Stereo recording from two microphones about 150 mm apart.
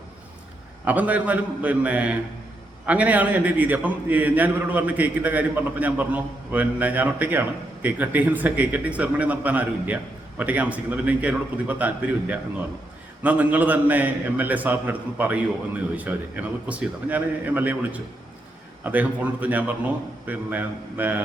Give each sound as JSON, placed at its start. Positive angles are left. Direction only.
{"t": 0.9, "sound": "a man's voice", "side_deg": -10}